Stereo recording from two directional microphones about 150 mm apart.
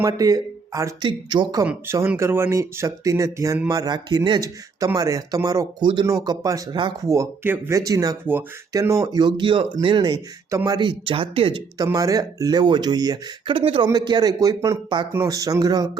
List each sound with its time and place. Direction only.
0.0 s speech: 25° right (ahead or behind)
1.6 s speech: 15° right (ahead or behind); by 7.1 s 30° right (ahead or behind)
7.1 s speech: 15° right (ahead or behind); by 11.6 s 35° right (ahead or behind)
11.8 s speech: 25° right (ahead or behind)